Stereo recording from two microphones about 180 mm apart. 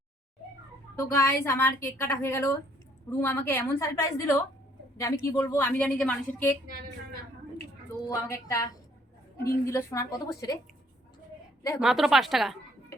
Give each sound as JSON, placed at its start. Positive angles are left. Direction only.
{"t": 0.9, "sound": "a woman's voice", "side_deg": 15}
{"t": 8.0, "sound": "a woman's voice", "side_deg": 15}
{"t": 11.8, "sound": "a woman's voice", "side_deg": 0}